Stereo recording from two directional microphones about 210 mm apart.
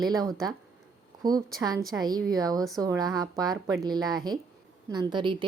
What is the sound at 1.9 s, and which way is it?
A woman's voice, 20° right (ahead or behind).